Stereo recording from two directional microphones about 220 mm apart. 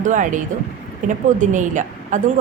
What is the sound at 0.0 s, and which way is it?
A woman's voice, 35° right (ahead or behind).